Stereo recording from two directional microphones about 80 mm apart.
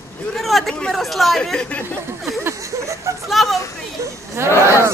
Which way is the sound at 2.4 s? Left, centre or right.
Right.